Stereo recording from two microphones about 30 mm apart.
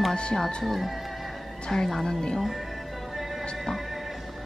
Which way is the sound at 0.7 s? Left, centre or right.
Centre.